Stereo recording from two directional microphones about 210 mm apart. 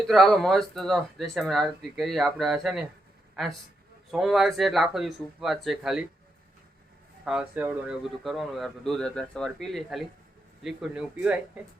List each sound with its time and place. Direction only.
0.1 s a man's voice: centre (ahead or behind)
7.3 s speech: 5° right (ahead or behind)